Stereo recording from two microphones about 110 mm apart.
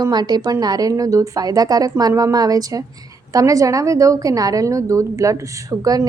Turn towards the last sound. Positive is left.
turn(degrees=-35)  # may be behind; listen again after turning